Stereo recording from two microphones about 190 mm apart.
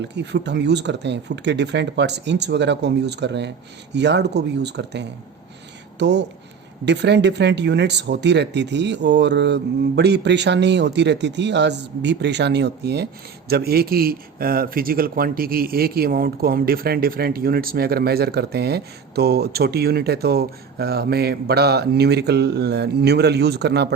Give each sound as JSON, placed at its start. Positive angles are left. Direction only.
{"t": 0.0, "sound": "a man's voice", "side_deg": -65}